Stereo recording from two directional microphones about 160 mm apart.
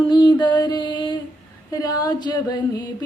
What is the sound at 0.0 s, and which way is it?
Music, 30° left (ahead or behind).